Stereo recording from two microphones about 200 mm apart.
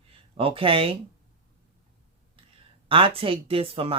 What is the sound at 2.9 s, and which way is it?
Speech, 25° right (ahead or behind).